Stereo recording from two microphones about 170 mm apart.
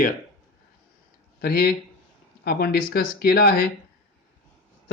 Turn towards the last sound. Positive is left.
turn(degrees=65)  # may be behind; listen again after turning